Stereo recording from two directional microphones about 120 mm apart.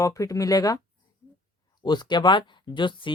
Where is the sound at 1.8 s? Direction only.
40° left (ahead or behind).